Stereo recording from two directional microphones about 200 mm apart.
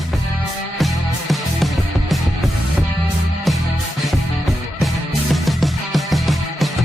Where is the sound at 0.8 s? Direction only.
Centre (ahead or behind).